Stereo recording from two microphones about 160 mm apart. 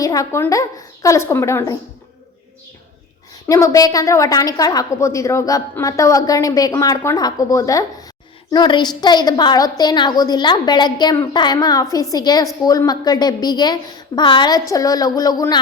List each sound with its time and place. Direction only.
0.0 s a woman's voice: 20° left (ahead or behind)
3.4 s a woman's voice: 20° left (ahead or behind)